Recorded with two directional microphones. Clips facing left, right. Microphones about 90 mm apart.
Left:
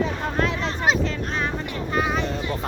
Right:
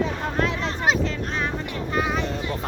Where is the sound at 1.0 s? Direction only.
50° left (ahead or behind).